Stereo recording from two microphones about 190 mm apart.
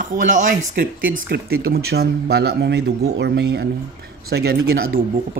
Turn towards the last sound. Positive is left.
turn(degrees=-55)  # may be behind; listen again after turning